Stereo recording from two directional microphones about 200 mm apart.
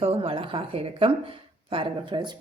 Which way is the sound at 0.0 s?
25° right (ahead or behind).